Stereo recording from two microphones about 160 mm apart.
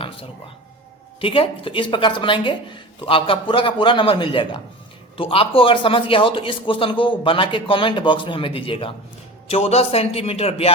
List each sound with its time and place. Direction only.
1.2 s speech: 35° left (ahead or behind)